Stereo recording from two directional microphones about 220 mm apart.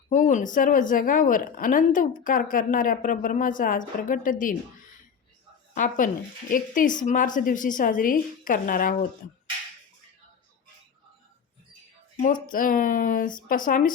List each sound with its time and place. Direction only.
0.1 s a woman's voice: 35° left (ahead or behind)
5.7 s a woman's voice: 35° left (ahead or behind)
12.2 s a woman's voice: 35° left (ahead or behind)